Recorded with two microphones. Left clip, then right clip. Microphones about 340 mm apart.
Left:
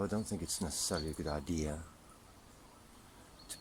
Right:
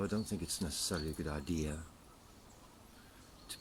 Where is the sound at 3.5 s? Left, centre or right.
Centre.